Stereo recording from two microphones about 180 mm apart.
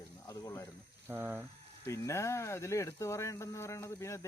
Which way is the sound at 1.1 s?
10° right (ahead or behind).